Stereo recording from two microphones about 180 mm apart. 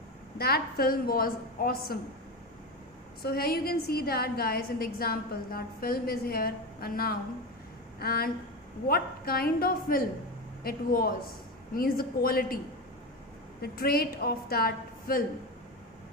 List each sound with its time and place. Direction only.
0.3 s a woman's voice: 60° left (ahead or behind)
3.2 s a woman's voice: 60° left (ahead or behind)
13.6 s a woman's voice: 55° left (ahead or behind)